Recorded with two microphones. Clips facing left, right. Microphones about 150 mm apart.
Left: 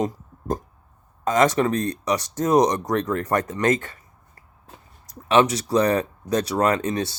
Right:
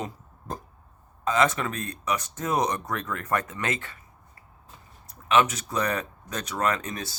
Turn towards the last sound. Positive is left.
turn(degrees=30)  # may be behind; listen again after turning